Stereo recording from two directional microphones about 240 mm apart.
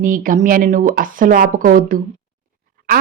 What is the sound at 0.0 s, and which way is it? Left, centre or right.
Speech, right.